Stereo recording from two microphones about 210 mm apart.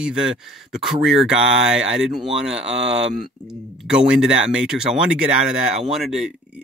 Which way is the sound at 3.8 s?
5° right (ahead or behind).